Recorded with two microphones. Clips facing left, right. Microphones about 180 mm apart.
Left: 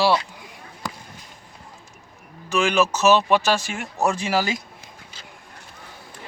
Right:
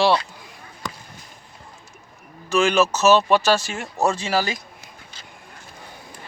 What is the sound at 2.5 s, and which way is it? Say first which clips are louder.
Speech: right 2 dB; 15° left (ahead or behind).